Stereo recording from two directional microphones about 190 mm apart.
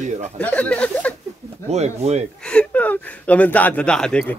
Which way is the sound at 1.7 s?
35° right (ahead or behind).